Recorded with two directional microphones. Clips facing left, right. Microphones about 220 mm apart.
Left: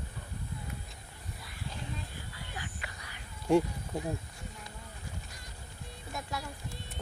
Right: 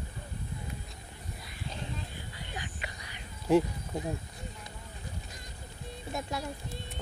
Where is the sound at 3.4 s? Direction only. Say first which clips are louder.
Right 1 dB; centre (ahead or behind).